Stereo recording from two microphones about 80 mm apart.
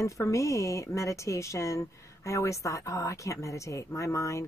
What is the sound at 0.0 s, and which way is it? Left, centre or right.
Speech, left.